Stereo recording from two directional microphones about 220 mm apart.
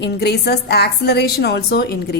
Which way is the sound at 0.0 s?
50° left (ahead or behind).